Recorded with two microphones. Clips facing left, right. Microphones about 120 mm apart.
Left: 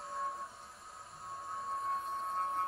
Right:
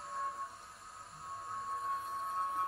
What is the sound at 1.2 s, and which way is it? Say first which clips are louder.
Music: even; centre (ahead or behind).